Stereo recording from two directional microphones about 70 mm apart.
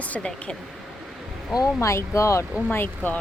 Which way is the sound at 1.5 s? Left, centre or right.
Left.